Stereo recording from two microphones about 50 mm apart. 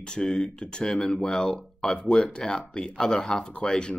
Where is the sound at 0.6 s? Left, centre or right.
Centre.